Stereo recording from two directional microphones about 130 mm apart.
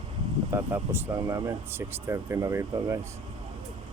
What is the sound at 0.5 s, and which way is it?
Speech, 15° right (ahead or behind).